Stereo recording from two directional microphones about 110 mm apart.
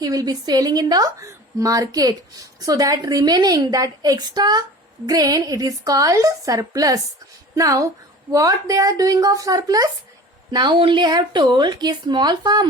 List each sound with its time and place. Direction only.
0.0 s a woman's voice: 35° right (ahead or behind)